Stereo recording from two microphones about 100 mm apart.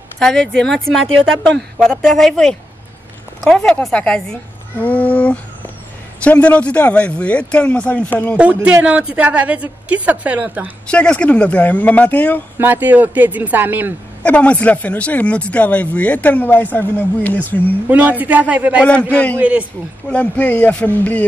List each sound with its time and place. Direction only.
0.2 s a woman's voice: 5° left (ahead or behind)
8.4 s a woman's voice: 15° right (ahead or behind)
10.9 s speech: 10° left (ahead or behind)
12.5 s a woman's voice: 20° right (ahead or behind)
14.2 s speech: 15° left (ahead or behind)
17.8 s a woman's voice: 15° right (ahead or behind)
18.9 s speech: 10° left (ahead or behind)
19.3 s a woman's voice: 15° right (ahead or behind)
20.1 s speech: 15° left (ahead or behind)